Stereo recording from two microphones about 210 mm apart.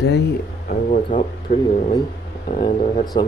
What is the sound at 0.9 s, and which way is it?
Speech, 35° left (ahead or behind).